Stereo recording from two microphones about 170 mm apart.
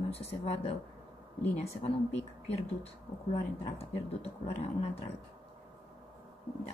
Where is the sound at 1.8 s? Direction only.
35° left (ahead or behind).